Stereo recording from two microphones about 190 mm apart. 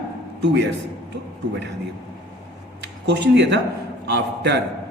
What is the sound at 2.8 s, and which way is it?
A man's voice, 65° right (ahead or behind).